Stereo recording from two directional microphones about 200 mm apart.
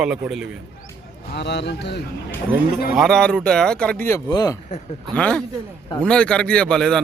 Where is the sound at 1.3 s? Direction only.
60° left (ahead or behind).